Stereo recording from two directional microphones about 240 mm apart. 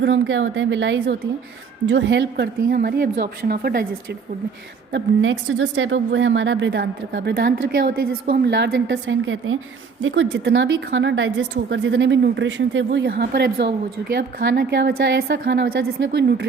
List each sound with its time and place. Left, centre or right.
0.0 s a woman's voice: right
4.9 s a woman's voice: right